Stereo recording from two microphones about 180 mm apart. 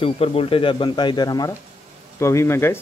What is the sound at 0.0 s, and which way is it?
A man's voice, 30° left (ahead or behind).